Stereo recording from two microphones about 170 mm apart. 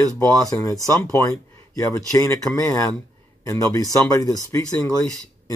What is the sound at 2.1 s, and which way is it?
Speech, 15° left (ahead or behind).